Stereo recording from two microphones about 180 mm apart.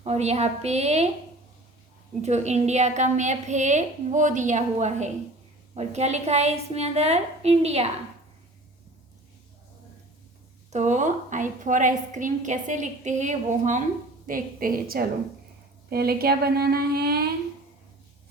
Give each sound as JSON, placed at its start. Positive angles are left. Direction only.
{"t": 0.0, "sound": "a woman's voice", "side_deg": -35}
{"t": 2.2, "sound": "a woman's voice", "side_deg": -40}
{"t": 10.7, "sound": "a woman's voice", "side_deg": -40}